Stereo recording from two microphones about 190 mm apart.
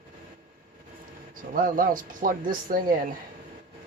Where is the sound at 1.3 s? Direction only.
45° right (ahead or behind).